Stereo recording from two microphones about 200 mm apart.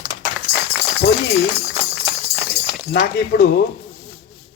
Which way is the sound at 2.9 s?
50° left (ahead or behind).